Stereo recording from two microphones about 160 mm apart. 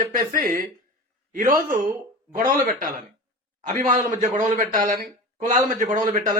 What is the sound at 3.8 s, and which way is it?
A man's voice, 50° right (ahead or behind).